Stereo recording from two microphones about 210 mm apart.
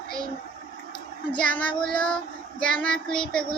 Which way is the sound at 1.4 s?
5° left (ahead or behind).